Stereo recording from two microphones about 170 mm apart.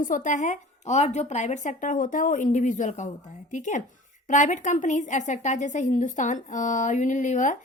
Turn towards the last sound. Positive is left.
turn(degrees=45)  # may be behind; listen again after turning